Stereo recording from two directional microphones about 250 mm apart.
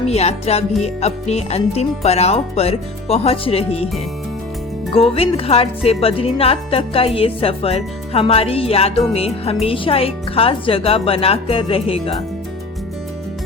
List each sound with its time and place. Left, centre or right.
0.1 s speech: left
4.9 s speech: left